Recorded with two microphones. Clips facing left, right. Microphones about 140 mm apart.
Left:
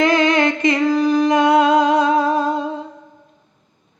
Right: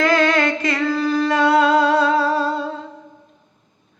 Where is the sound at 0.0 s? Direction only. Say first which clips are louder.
Left 2 dB; 20° left (ahead or behind).